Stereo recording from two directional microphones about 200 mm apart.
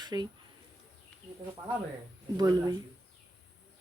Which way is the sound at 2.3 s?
20° right (ahead or behind).